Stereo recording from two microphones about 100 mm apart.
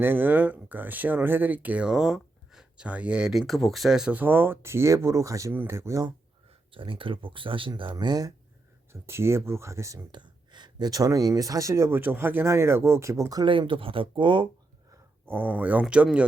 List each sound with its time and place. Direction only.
0.0 s speech: 20° right (ahead or behind)
4.2 s speech: 20° right (ahead or behind)
6.7 s speech: 60° right (ahead or behind); by 8.3 s 45° right (ahead or behind)
8.9 s speech: 25° right (ahead or behind)
10.1 s speech: 50° right (ahead or behind); by 13.4 s 30° right (ahead or behind)
13.4 s speech: 55° right (ahead or behind)
15.3 s speech: 20° right (ahead or behind)